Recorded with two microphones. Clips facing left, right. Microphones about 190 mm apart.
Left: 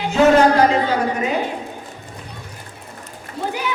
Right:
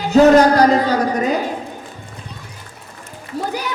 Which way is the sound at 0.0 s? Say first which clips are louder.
Right 3 dB; 40° right (ahead or behind).